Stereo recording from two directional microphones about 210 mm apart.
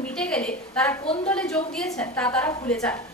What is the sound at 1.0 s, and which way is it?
Speech, 25° left (ahead or behind).